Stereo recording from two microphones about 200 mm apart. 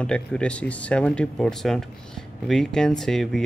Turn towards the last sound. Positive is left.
turn(degrees=0)  # may be behind; listen again after turning